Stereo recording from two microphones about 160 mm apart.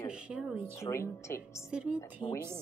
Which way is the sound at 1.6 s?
5° right (ahead or behind).